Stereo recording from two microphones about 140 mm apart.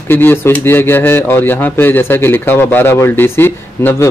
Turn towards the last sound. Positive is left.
turn(degrees=15)  # may be behind; listen again after turning